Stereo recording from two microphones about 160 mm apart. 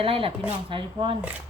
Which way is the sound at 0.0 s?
35° right (ahead or behind).